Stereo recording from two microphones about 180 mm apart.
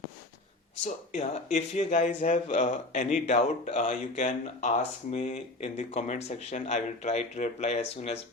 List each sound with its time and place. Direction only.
1.1 s speech: 40° left (ahead or behind)